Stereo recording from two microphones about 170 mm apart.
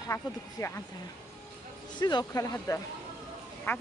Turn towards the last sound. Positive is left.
turn(degrees=15)  # may be behind; listen again after turning